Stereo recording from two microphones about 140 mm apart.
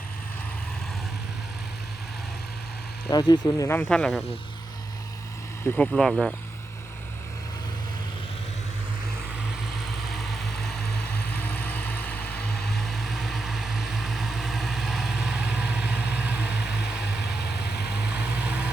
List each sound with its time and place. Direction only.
3.1 s speech: 30° left (ahead or behind)
3.8 s speech: 5° left (ahead or behind)
5.6 s speech: 5° left (ahead or behind)
10.1 s vehicle: centre (ahead or behind)
11.3 s vehicle: 10° left (ahead or behind); by 16.3 s 10° right (ahead or behind)
18.1 s vehicle: 10° right (ahead or behind)